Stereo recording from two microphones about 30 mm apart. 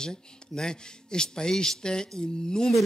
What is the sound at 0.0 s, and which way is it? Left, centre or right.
Speech, left.